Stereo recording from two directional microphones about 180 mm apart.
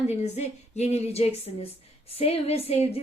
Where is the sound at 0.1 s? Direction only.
35° left (ahead or behind).